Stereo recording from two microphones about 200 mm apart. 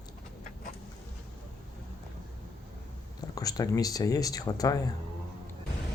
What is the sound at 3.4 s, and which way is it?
Speech, 20° left (ahead or behind).